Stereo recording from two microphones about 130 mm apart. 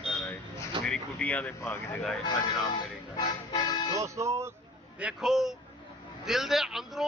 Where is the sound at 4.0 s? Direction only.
25° right (ahead or behind).